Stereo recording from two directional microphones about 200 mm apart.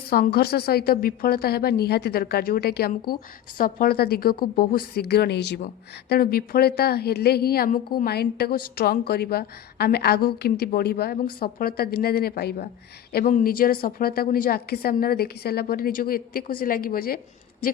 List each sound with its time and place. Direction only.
0.1 s a woman's voice: 50° left (ahead or behind)